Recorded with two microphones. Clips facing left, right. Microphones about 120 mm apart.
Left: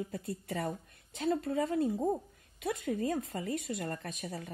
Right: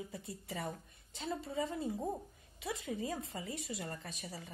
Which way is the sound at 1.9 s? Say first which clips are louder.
Left 7 dB; 20° left (ahead or behind).